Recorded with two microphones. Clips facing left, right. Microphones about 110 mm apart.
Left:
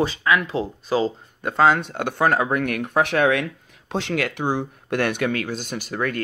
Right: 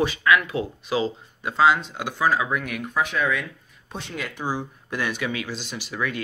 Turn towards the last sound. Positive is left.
turn(degrees=50)  # may be behind; listen again after turning